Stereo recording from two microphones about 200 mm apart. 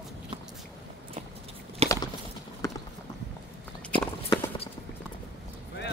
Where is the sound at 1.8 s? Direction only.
30° right (ahead or behind).